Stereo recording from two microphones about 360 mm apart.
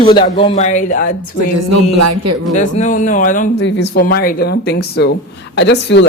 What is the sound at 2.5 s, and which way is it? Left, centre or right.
Speech, left.